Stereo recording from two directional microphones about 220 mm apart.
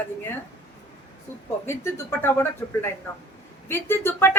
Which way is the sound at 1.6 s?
10° left (ahead or behind).